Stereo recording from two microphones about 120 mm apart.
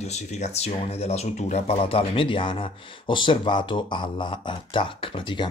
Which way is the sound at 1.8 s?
50° left (ahead or behind).